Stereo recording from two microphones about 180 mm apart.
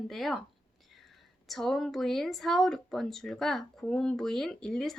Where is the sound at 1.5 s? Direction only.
Centre (ahead or behind).